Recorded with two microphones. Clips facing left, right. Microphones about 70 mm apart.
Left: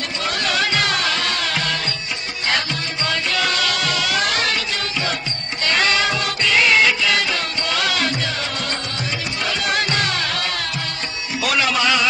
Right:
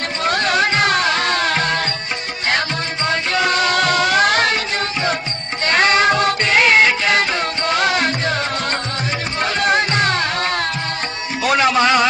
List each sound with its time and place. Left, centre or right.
0.2 s music: right
3.1 s music: right
5.7 s music: right
9.4 s music: right